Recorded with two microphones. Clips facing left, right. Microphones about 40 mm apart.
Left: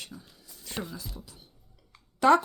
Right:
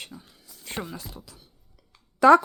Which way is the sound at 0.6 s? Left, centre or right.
Right.